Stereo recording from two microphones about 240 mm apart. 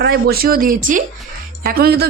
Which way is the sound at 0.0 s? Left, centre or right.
Right.